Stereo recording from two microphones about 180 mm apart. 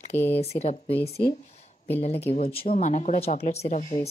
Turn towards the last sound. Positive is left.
turn(degrees=40)  # may be behind; listen again after turning